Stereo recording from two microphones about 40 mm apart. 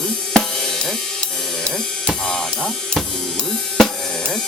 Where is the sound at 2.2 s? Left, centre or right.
Left.